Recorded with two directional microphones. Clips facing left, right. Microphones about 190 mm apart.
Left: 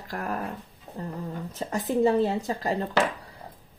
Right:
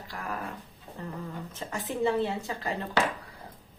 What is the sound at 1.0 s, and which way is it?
Speech, 35° left (ahead or behind).